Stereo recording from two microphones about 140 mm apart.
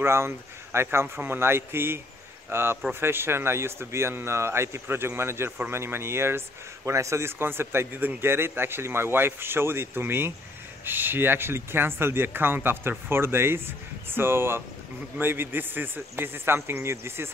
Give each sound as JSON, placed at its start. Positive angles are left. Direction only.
{"t": 0.0, "sound": "speech", "side_deg": -20}